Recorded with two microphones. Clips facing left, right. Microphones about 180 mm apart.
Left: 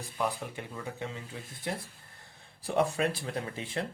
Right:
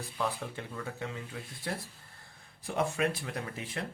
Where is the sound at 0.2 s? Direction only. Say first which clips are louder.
Left 2 dB; 15° left (ahead or behind).